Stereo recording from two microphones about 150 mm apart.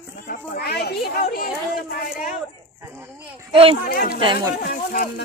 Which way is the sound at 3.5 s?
35° right (ahead or behind).